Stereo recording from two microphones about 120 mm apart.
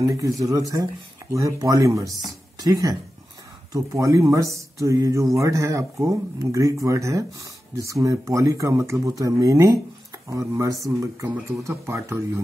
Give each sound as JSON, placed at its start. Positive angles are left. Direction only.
{"t": 0.0, "sound": "speech", "side_deg": -30}
{"t": 2.0, "sound": "speech", "side_deg": 0}
{"t": 2.6, "sound": "speech", "side_deg": -30}
{"t": 11.2, "sound": "speech", "side_deg": -15}
{"t": 11.6, "sound": "speech", "side_deg": -25}